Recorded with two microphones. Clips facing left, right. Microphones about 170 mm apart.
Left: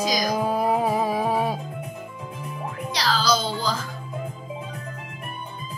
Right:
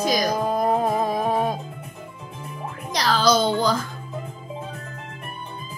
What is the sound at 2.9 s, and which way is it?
Music, 50° right (ahead or behind).